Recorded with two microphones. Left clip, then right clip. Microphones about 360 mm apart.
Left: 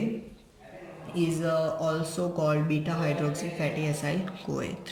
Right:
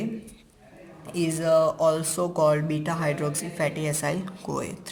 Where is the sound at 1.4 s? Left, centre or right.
Centre.